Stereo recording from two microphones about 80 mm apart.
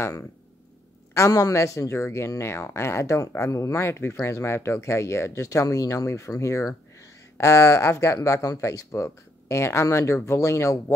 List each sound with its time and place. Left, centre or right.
0.0 s speech: left